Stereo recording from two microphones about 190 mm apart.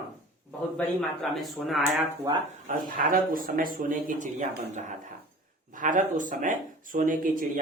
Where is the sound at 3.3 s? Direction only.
45° right (ahead or behind).